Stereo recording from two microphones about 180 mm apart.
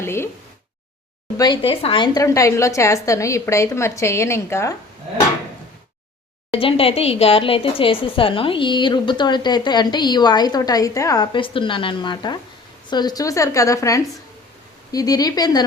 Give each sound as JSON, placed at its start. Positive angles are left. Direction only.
{"t": 0.0, "sound": "speech", "side_deg": 15}
{"t": 1.4, "sound": "a woman's voice", "side_deg": 25}
{"t": 6.5, "sound": "a woman's voice", "side_deg": 30}